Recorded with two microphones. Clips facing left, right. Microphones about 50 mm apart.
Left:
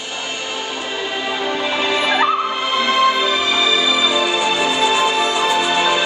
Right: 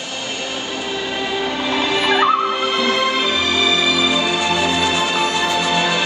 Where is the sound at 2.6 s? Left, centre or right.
Left.